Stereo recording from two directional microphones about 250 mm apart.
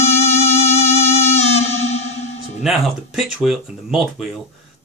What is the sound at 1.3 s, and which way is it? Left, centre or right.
Music, left.